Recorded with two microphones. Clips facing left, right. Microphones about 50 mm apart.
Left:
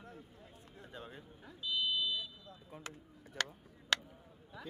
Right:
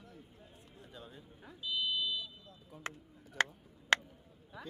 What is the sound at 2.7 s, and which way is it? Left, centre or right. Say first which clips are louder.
Speech: right 5 dB; left.